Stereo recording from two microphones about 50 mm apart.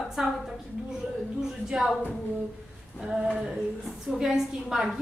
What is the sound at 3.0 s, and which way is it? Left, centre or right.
A woman's voice, centre.